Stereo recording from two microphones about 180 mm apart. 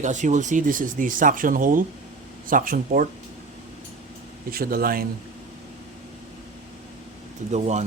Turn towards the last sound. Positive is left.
turn(degrees=-40)  # may be behind; listen again after turning